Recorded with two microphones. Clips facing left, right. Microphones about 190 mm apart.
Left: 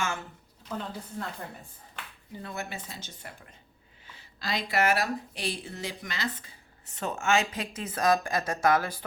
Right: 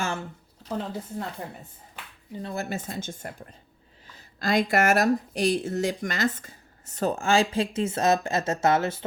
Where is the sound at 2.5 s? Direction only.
45° right (ahead or behind).